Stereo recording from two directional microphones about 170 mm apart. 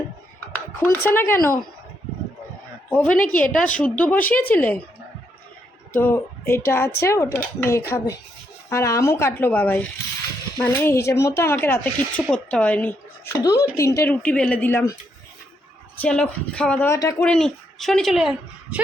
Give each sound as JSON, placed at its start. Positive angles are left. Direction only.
{"t": 0.5, "sound": "speech", "side_deg": 10}
{"t": 2.9, "sound": "speech", "side_deg": 5}
{"t": 3.2, "sound": "a woman's voice", "side_deg": 50}
{"t": 3.8, "sound": "speech", "side_deg": 10}
{"t": 5.9, "sound": "speech", "side_deg": 15}
{"t": 16.0, "sound": "speech", "side_deg": 5}
{"t": 17.2, "sound": "a woman's voice", "side_deg": 5}